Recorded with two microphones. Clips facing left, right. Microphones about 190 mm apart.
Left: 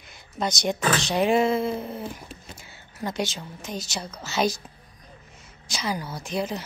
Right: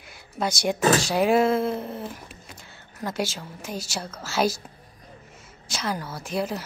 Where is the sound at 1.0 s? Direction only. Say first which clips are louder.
Right 1 dB; 5° right (ahead or behind).